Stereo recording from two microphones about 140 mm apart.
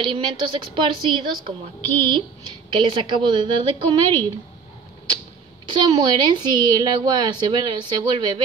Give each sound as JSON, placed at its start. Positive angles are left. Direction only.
{"t": 0.1, "sound": "a woman's voice", "side_deg": -35}
{"t": 1.8, "sound": "a woman's voice", "side_deg": 15}
{"t": 2.0, "sound": "a woman's voice", "side_deg": -35}
{"t": 5.7, "sound": "a woman's voice", "side_deg": -35}